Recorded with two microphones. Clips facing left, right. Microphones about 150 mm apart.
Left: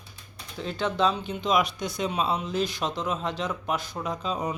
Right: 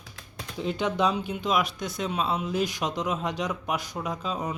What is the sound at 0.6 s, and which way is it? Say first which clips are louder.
Speech: even; 15° right (ahead or behind).